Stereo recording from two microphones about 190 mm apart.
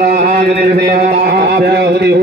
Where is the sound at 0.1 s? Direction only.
50° right (ahead or behind).